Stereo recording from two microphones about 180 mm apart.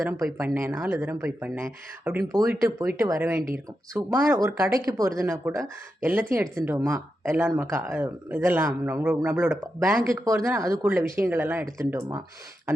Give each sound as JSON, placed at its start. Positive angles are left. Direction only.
{"t": 0.0, "sound": "speech", "side_deg": -15}